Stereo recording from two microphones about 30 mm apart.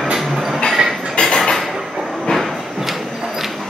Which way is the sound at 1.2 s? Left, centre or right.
Centre.